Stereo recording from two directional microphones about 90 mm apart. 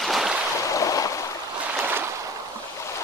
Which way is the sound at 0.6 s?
40° left (ahead or behind).